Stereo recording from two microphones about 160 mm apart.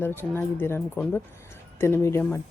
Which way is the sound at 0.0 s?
15° left (ahead or behind).